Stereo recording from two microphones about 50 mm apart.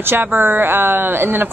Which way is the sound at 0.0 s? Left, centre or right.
Right.